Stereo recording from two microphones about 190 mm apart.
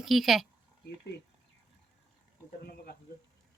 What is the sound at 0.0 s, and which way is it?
Speech, centre (ahead or behind).